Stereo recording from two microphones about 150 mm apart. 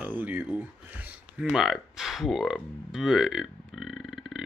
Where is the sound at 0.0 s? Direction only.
10° right (ahead or behind).